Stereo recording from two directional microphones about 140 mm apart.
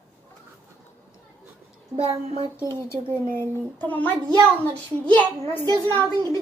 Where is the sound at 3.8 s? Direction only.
10° left (ahead or behind).